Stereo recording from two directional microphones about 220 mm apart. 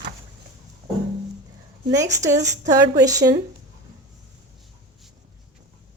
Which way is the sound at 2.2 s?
15° right (ahead or behind).